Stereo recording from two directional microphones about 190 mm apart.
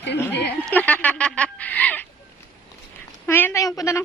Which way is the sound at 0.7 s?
10° left (ahead or behind).